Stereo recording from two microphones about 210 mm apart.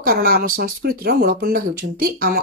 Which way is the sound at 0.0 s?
45° right (ahead or behind).